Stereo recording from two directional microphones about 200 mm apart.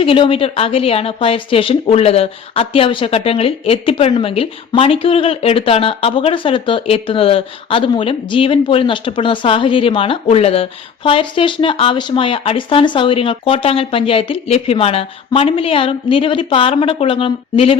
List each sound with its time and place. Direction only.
0.0 s a woman's voice: 25° left (ahead or behind)